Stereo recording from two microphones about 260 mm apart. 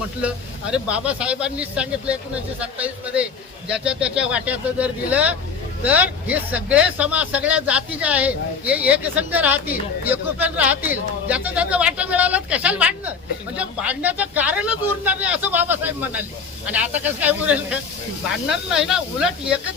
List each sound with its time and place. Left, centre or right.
0.2 s speech: centre